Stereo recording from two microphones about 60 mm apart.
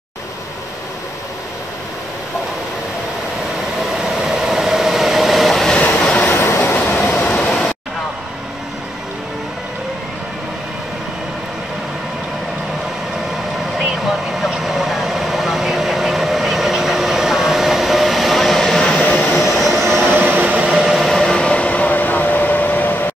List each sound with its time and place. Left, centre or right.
3.8 s vehicle: centre
5.8 s train: left
6.3 s train: left
6.9 s train: centre
7.3 s vehicle: centre
14.4 s vehicle: centre
18.9 s train: left
19.3 s train: centre
20.1 s train: right
20.7 s a sound: centre
21.2 s a sound: centre; by 23.0 s left